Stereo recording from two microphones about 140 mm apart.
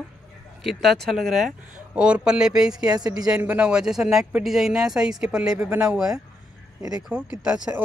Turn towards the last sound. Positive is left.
turn(degrees=-5)  # may be behind; listen again after turning